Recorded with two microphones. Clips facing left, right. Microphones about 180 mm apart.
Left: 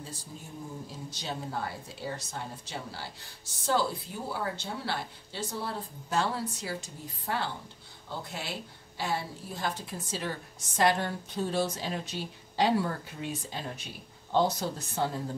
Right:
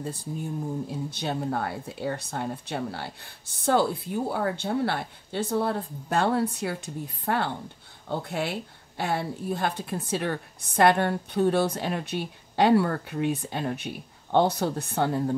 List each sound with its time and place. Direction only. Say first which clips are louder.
0.0 s a woman's voice: right 11 dB; 60° right (ahead or behind)